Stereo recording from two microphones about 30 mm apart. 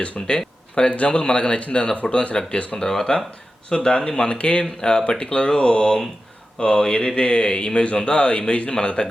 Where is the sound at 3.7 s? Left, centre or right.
Left.